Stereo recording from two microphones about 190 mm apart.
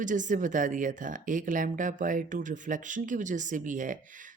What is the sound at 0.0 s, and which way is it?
A woman's voice, 40° right (ahead or behind).